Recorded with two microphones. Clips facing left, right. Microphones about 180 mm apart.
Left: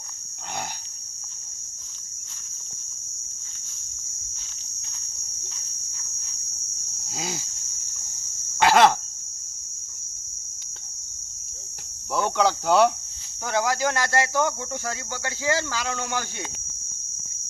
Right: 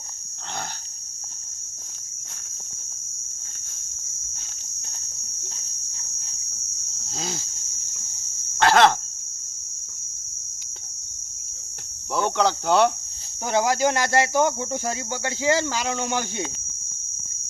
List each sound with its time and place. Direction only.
7.1 s a sound: 10° left (ahead or behind)
8.5 s cricket: 5° left (ahead or behind)
12.1 s speech: centre (ahead or behind)
13.4 s speech: 20° right (ahead or behind)